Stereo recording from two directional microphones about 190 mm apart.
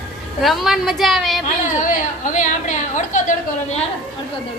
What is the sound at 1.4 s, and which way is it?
A woman's voice, 40° left (ahead or behind).